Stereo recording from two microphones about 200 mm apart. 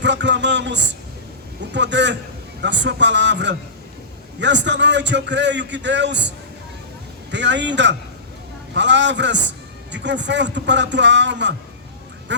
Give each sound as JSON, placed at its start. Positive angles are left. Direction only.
{"t": 0.0, "sound": "a man's voice", "side_deg": -60}